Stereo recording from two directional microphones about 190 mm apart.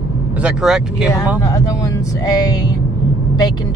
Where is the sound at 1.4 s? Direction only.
20° left (ahead or behind).